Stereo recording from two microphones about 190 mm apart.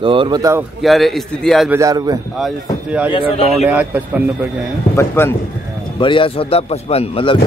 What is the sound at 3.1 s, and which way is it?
Speech, 30° left (ahead or behind).